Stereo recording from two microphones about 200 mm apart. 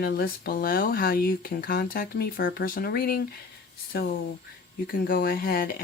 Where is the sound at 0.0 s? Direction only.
50° left (ahead or behind).